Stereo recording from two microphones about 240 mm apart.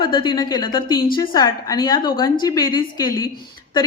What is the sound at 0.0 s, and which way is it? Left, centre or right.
A woman's voice, centre.